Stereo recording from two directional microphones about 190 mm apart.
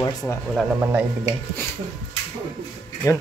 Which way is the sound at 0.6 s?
10° right (ahead or behind).